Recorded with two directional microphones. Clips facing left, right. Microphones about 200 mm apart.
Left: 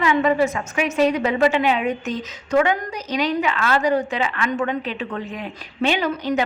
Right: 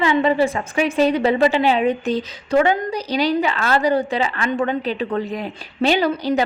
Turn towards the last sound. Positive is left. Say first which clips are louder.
# right 3 dB
turn(degrees=-35)  # may be behind; listen again after turning